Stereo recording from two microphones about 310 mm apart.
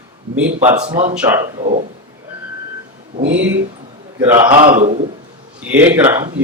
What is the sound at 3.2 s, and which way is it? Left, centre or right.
Speech, right.